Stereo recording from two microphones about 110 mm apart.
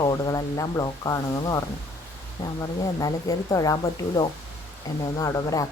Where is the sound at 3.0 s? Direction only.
35° left (ahead or behind).